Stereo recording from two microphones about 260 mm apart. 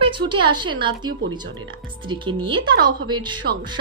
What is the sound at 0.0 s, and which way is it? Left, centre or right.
A woman's voice, centre.